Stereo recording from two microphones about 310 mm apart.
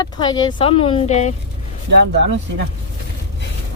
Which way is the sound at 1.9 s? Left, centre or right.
Right.